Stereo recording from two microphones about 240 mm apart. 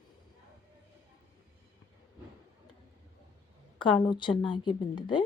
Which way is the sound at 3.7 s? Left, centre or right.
Centre.